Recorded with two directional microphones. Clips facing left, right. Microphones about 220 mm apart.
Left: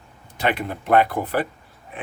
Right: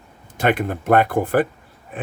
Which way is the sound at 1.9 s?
45° right (ahead or behind).